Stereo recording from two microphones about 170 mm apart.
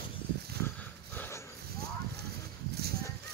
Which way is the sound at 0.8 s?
10° left (ahead or behind).